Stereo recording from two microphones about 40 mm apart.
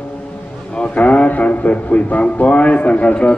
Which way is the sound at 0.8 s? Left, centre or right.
Left.